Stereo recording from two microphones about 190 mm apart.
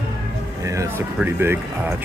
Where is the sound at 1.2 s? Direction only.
10° right (ahead or behind).